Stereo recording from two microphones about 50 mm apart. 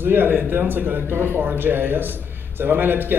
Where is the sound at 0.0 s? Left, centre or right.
Right.